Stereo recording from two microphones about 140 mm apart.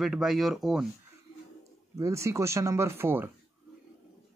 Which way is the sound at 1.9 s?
20° right (ahead or behind).